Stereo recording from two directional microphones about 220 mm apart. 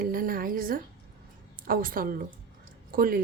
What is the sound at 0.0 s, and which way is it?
Speech, 40° right (ahead or behind).